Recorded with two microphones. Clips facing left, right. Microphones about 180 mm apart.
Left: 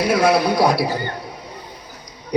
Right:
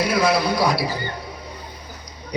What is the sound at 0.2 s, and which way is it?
Speech, 60° left (ahead or behind).